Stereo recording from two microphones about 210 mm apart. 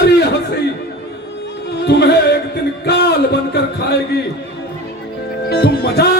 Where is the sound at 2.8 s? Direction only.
55° left (ahead or behind).